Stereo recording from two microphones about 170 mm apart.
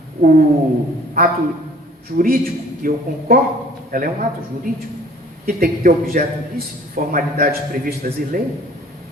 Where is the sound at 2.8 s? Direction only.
55° right (ahead or behind).